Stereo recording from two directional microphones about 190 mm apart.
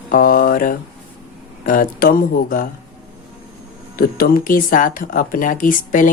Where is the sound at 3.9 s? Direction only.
50° left (ahead or behind).